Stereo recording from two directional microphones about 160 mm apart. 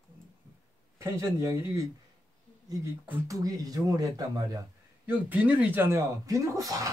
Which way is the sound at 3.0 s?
20° right (ahead or behind).